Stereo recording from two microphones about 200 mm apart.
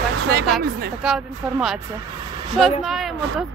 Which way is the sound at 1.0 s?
Centre (ahead or behind).